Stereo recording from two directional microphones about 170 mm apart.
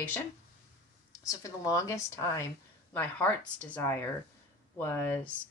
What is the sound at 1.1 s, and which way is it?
Speech, 20° left (ahead or behind).